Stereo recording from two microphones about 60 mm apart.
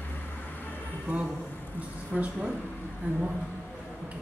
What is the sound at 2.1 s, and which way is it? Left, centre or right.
A woman's voice, centre.